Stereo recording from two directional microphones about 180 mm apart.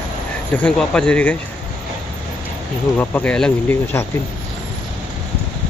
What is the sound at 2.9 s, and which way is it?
Speech, 10° left (ahead or behind).